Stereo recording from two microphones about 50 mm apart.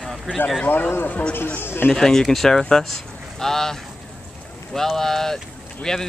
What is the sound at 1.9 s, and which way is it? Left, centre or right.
Speech, centre.